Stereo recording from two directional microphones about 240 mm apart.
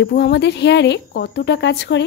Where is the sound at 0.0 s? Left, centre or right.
Left.